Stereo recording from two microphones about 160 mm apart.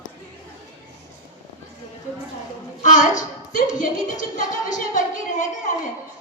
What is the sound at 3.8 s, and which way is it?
Speech, 55° left (ahead or behind).